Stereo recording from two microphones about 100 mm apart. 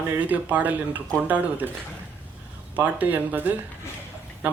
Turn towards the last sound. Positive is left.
turn(degrees=-15)  # may be behind; listen again after turning